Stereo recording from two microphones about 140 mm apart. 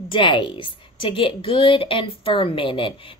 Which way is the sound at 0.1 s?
35° left (ahead or behind).